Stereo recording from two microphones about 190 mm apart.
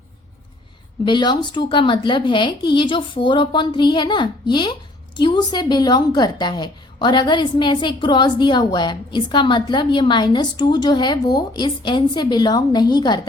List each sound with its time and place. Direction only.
1.0 s speech: 25° left (ahead or behind)